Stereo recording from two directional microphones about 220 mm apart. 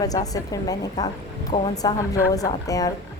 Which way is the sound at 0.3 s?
15° left (ahead or behind).